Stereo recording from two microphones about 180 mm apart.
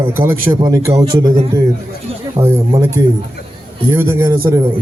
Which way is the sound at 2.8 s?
15° right (ahead or behind).